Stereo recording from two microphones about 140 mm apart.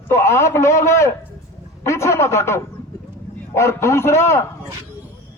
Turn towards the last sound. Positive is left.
turn(degrees=20)  # may be behind; listen again after turning